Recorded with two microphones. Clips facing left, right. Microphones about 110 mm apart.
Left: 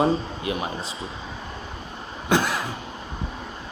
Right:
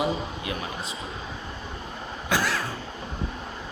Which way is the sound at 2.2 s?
20° left (ahead or behind).